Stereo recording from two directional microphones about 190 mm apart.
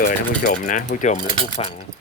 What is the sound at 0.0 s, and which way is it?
Speech, 50° left (ahead or behind).